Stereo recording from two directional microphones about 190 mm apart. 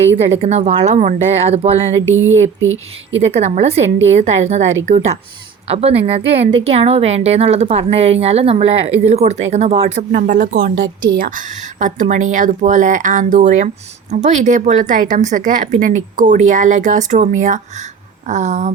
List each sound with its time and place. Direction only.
0.3 s a woman's voice: 35° right (ahead or behind)
2.0 s speech: 90° right
3.2 s a woman's voice: 35° right (ahead or behind)